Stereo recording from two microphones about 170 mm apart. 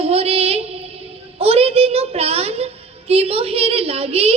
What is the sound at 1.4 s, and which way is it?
A woman's voice, 35° right (ahead or behind).